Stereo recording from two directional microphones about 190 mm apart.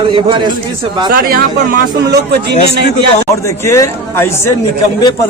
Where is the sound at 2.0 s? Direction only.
60° right (ahead or behind).